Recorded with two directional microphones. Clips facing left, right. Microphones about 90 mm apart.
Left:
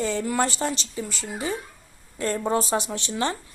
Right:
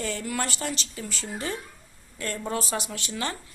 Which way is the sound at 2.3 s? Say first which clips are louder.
Left 6 dB; 30° left (ahead or behind).